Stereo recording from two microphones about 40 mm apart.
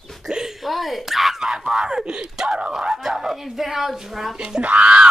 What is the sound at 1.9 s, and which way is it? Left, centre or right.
Speech, centre.